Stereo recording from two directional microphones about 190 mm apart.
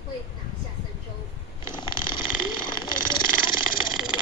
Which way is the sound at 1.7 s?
25° left (ahead or behind).